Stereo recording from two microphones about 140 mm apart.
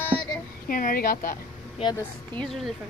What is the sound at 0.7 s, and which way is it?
Speech, 85° left.